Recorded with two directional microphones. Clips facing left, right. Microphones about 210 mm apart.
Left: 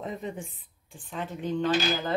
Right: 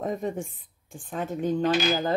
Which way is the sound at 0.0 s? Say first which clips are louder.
Right 6 dB; 45° right (ahead or behind).